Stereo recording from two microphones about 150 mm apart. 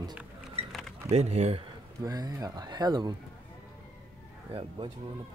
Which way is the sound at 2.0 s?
25° right (ahead or behind).